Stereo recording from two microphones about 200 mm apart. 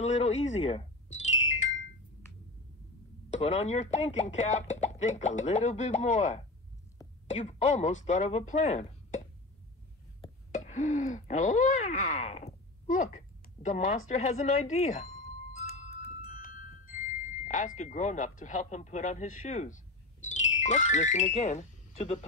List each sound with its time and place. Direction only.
0.0 s speech: 35° left (ahead or behind)
3.3 s speech: 35° left (ahead or behind)
10.5 s speech: 35° left (ahead or behind)
15.7 s music: 35° left (ahead or behind)
16.2 s speech: 45° left (ahead or behind)